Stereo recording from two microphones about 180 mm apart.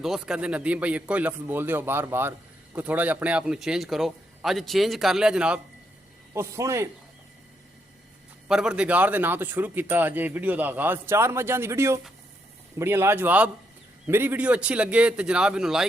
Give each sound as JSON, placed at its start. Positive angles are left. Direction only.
{"t": 0.0, "sound": "a man's voice", "side_deg": -5}
{"t": 6.3, "sound": "a man's voice", "side_deg": -15}
{"t": 8.4, "sound": "a man's voice", "side_deg": -5}